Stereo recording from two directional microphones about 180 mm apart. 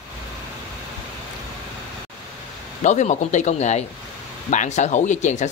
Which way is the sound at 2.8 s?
40° left (ahead or behind).